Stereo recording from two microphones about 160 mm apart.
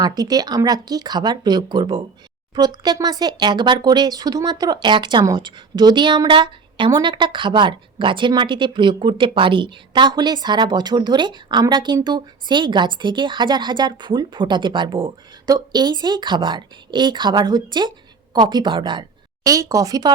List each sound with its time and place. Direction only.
0.0 s speech: 25° right (ahead or behind)